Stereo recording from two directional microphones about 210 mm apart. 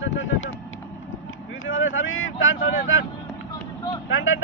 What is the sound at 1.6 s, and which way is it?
Speech, 70° left (ahead or behind).